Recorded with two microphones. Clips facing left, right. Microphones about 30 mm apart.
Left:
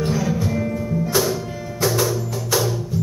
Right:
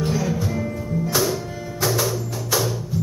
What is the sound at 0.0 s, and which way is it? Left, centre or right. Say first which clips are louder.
Music: left 2 dB; centre.